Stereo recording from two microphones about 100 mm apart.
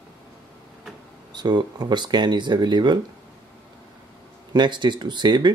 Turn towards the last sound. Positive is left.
turn(degrees=-45)  # may be behind; listen again after turning